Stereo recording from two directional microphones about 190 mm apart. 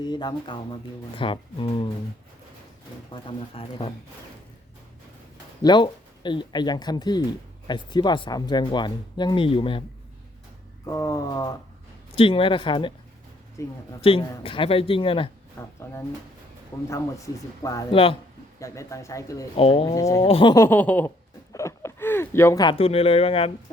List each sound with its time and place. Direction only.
0.0 s speech: 20° left (ahead or behind)
3.1 s speech: 30° left (ahead or behind)
5.6 s speech: 25° left (ahead or behind)
10.8 s speech: 15° left (ahead or behind)
14.0 s speech: 30° left (ahead or behind)
15.5 s speech: 15° left (ahead or behind)
17.9 s speech: 30° left (ahead or behind)
18.6 s speech: 15° left (ahead or behind)
19.5 s speech: 30° left (ahead or behind)
19.9 s speech: 15° left (ahead or behind)
20.2 s speech: 30° left (ahead or behind)
20.6 s speech: 10° left (ahead or behind)
21.5 s a sound: 15° left (ahead or behind)
22.7 s speech: 30° left (ahead or behind)